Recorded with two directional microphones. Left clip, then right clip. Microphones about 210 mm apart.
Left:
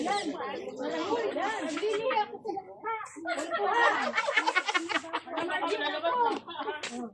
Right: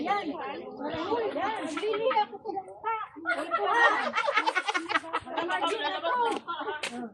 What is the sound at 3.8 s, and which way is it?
Speech, 20° right (ahead or behind).